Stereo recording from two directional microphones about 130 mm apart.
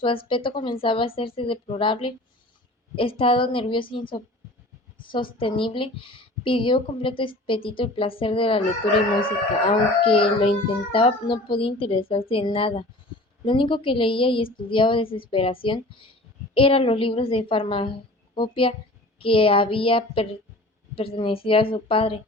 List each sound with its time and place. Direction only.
0.0 s a woman's voice: 40° left (ahead or behind)